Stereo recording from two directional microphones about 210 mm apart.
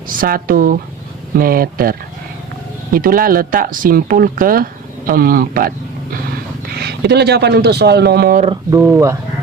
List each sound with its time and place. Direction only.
0.1 s speech: 40° right (ahead or behind)
8.4 s speech: 15° right (ahead or behind)